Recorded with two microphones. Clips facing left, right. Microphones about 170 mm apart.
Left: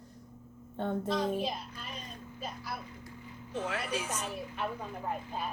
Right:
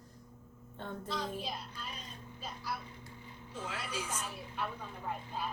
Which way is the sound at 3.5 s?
65° left (ahead or behind).